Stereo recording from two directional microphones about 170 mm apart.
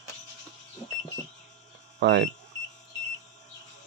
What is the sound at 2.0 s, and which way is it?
Speech, 85° right.